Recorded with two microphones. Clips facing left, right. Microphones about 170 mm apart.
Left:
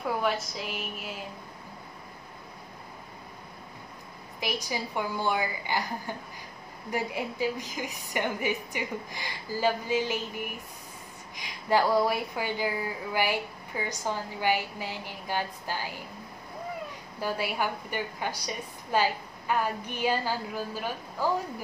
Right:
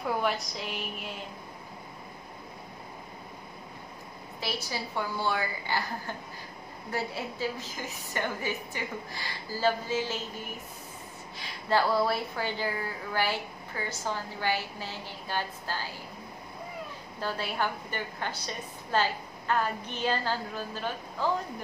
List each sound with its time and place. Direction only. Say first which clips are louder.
0.0 s a woman's voice: left 1 dB; centre (ahead or behind)
4.4 s a woman's voice: left 3 dB; 15° left (ahead or behind)
17.2 s a woman's voice: left 2 dB; 10° left (ahead or behind)